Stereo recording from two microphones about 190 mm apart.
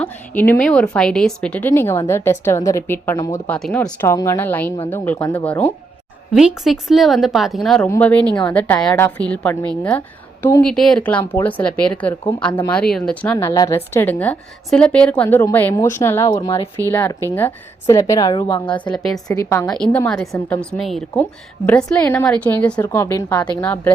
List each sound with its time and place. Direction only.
0.0 s a woman's voice: 10° left (ahead or behind)
6.3 s a woman's voice: centre (ahead or behind)
13.3 s a woman's voice: 20° left (ahead or behind)
18.9 s a woman's voice: centre (ahead or behind)
19.3 s a woman's voice: 15° left (ahead or behind)
19.6 s a woman's voice: 5° left (ahead or behind)